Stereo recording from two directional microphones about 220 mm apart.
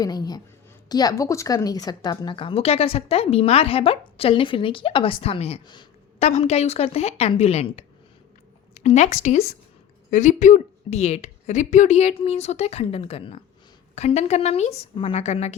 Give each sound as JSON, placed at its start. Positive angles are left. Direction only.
{"t": 0.0, "sound": "speech", "side_deg": 15}